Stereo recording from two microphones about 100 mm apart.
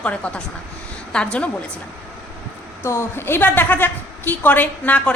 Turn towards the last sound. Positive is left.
turn(degrees=15)  # may be behind; listen again after turning